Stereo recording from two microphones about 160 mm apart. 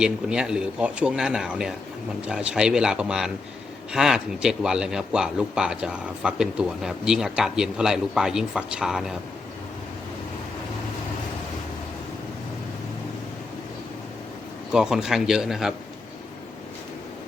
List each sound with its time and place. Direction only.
0.0 s a man's voice: 5° right (ahead or behind)
14.7 s a man's voice: 5° right (ahead or behind)